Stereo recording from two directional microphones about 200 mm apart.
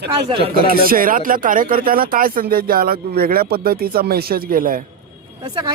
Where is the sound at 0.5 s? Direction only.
45° right (ahead or behind).